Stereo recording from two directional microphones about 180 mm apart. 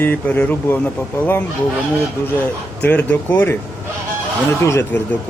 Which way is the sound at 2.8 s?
10° left (ahead or behind).